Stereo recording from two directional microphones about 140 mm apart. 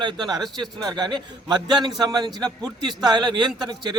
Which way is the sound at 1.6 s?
30° right (ahead or behind).